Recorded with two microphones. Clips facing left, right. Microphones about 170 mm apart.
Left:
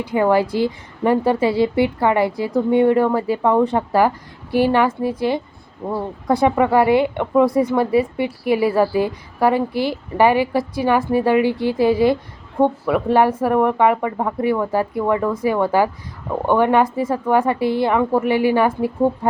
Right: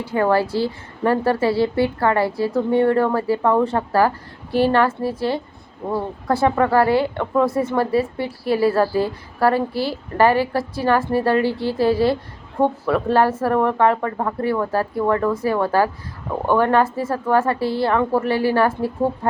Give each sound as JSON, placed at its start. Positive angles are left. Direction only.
{"t": 0.0, "sound": "a woman's voice", "side_deg": 15}